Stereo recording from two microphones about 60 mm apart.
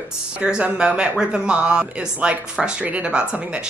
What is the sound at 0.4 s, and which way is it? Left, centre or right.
Speech, centre.